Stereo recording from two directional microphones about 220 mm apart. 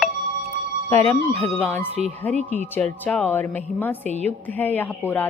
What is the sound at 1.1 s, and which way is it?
Speech, 10° left (ahead or behind).